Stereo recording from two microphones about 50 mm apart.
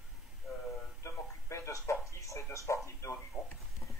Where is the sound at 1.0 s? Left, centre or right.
Left.